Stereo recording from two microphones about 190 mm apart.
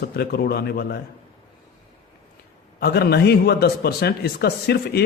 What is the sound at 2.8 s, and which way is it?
Speech, 60° left (ahead or behind).